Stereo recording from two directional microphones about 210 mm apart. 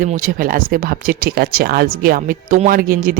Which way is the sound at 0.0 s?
40° right (ahead or behind).